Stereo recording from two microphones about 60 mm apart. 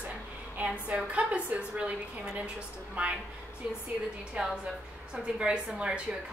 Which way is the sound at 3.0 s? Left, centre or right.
Right.